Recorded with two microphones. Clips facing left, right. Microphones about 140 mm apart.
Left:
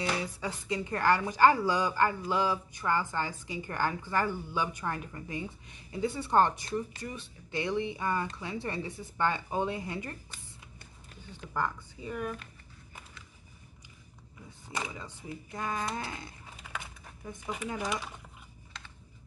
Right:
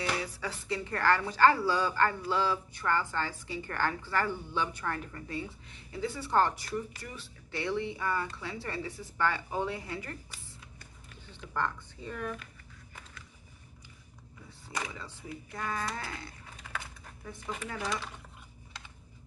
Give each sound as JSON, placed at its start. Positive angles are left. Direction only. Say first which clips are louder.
{"t": 0.0, "sound": "speech", "louder": "left 1 dB", "side_deg": 20}
{"t": 11.5, "sound": "speech", "louder": "even", "side_deg": 10}
{"t": 14.8, "sound": "speech", "louder": "left 1 dB", "side_deg": 15}